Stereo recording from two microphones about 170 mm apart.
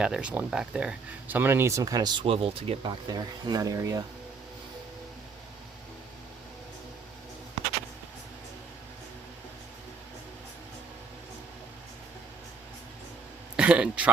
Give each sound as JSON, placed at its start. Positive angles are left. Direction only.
{"t": 0.0, "sound": "speech", "side_deg": -5}
{"t": 3.1, "sound": "speech", "side_deg": -25}
{"t": 13.6, "sound": "a sound", "side_deg": -5}